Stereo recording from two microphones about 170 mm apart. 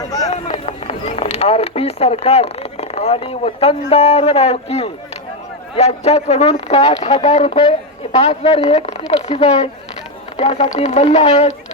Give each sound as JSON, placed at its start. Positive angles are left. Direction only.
{"t": 0.3, "sound": "a man's voice", "side_deg": 40}